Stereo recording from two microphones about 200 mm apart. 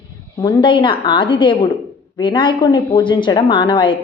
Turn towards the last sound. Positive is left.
turn(degrees=25)  # may be behind; listen again after turning